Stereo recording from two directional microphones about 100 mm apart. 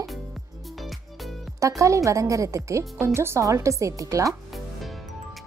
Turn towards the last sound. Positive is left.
turn(degrees=-35)  # may be behind; listen again after turning